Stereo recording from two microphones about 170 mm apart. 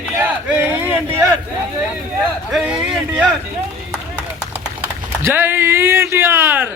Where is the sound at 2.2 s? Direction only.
Centre (ahead or behind).